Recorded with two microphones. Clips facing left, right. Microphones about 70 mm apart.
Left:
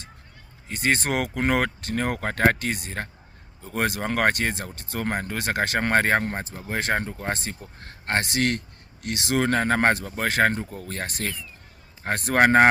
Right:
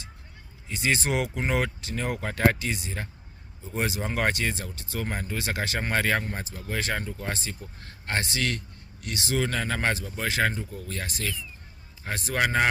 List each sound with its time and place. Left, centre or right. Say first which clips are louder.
0.7 s speech: left 2 dB; left